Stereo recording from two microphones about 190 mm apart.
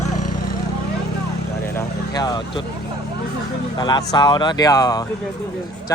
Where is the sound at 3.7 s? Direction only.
20° left (ahead or behind).